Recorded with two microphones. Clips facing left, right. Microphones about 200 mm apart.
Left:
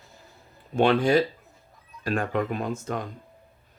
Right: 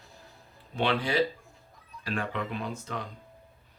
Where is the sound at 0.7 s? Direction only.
45° left (ahead or behind).